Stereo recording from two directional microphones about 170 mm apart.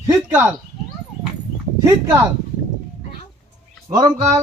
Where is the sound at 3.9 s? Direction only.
20° right (ahead or behind).